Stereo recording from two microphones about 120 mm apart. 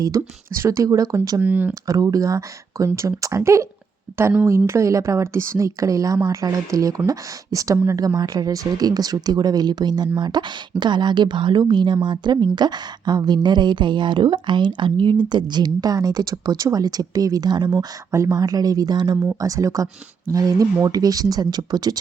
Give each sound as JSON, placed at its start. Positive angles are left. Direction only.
{"t": 0.0, "sound": "a woman's voice", "side_deg": -25}
{"t": 1.4, "sound": "speech", "side_deg": -15}
{"t": 1.9, "sound": "a woman's voice", "side_deg": -30}